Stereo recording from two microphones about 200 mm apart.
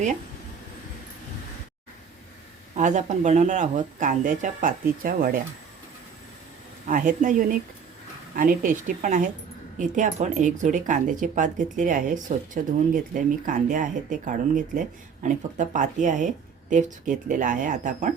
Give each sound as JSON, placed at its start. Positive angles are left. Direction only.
{"t": 2.7, "sound": "speech", "side_deg": -40}
{"t": 6.8, "sound": "speech", "side_deg": -40}